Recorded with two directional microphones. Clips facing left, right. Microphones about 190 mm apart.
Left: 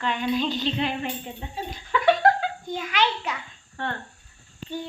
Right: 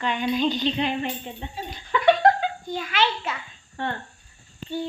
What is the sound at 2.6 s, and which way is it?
Speech, 15° left (ahead or behind).